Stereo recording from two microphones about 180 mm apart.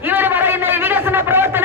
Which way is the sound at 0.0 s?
10° right (ahead or behind).